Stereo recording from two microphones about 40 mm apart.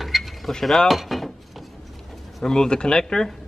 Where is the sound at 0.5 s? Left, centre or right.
Centre.